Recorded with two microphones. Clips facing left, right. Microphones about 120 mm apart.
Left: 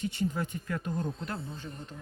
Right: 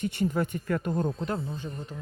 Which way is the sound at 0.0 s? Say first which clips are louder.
Right 4 dB; 60° right (ahead or behind).